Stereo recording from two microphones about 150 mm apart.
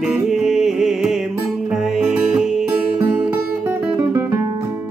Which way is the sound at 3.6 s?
15° right (ahead or behind).